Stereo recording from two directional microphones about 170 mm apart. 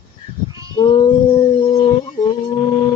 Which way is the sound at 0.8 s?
25° left (ahead or behind).